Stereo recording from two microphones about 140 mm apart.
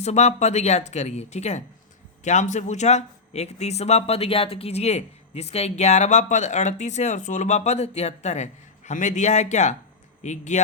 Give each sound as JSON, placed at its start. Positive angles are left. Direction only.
{"t": 0.0, "sound": "a woman's voice", "side_deg": 50}